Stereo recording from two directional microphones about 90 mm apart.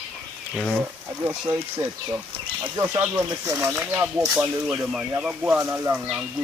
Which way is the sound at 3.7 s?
20° right (ahead or behind).